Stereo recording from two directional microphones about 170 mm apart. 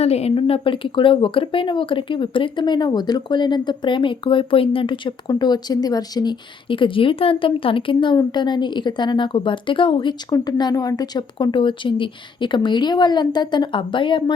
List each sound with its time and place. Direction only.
0.0 s speech: 40° left (ahead or behind)